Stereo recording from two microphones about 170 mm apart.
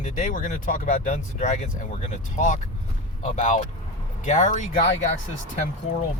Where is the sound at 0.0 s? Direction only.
50° left (ahead or behind).